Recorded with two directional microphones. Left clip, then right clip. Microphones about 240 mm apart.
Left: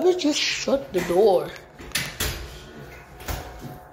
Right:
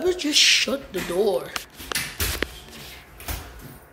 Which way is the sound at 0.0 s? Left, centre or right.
Centre.